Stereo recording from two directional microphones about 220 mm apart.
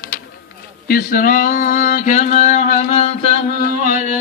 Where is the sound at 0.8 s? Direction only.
40° left (ahead or behind).